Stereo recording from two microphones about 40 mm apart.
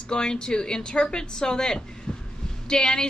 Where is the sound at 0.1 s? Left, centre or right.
Centre.